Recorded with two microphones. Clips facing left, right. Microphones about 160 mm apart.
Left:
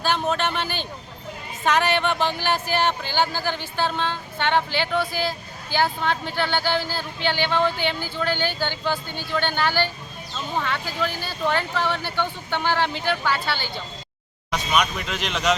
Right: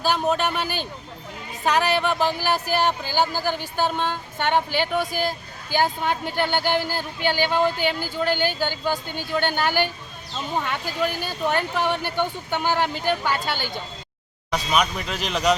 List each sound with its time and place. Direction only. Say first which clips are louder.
0.0 s speech: right 1 dB; 10° right (ahead or behind)
14.7 s speech: even; centre (ahead or behind)